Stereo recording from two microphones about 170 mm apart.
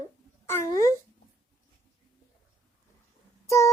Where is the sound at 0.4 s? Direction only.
15° left (ahead or behind).